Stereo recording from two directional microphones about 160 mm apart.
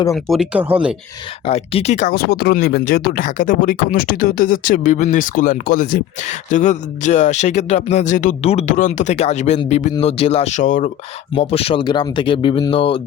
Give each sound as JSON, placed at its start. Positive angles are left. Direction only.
{"t": 0.1, "sound": "speech", "side_deg": 0}
{"t": 1.5, "sound": "speech", "side_deg": 40}
{"t": 11.3, "sound": "speech", "side_deg": 40}